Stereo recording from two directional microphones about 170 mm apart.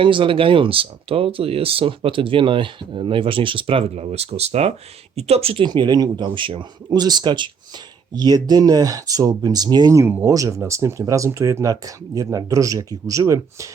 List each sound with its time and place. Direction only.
0.0 s speech: 30° right (ahead or behind)